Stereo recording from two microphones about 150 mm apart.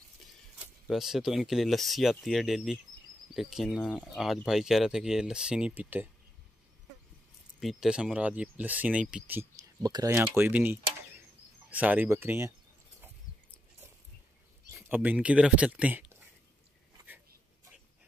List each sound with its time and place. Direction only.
0.6 s speech: centre (ahead or behind)
7.6 s speech: 5° right (ahead or behind)
9.8 s speech: 25° right (ahead or behind)
10.1 s speech: 15° right (ahead or behind)
14.7 s speech: 10° right (ahead or behind)